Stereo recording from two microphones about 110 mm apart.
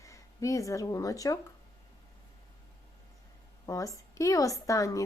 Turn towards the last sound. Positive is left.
turn(degrees=30)  # may be behind; listen again after turning